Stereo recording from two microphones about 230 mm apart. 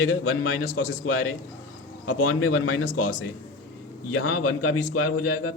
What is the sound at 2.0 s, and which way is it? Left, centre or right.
Speech, left.